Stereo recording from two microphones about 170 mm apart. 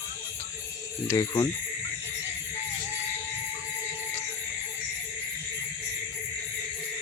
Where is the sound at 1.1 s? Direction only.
20° left (ahead or behind).